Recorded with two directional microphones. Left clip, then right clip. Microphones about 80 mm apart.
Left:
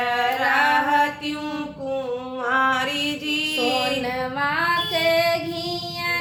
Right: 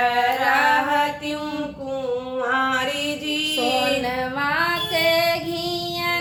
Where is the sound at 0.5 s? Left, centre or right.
Left.